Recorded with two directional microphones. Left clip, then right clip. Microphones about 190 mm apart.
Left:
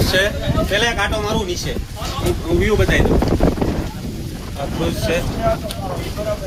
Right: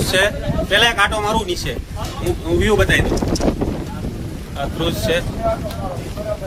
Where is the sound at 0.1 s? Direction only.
10° right (ahead or behind).